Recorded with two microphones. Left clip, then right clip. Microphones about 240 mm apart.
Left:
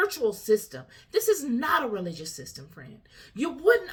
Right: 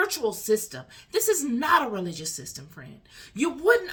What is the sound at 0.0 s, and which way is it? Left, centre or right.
Speech, centre.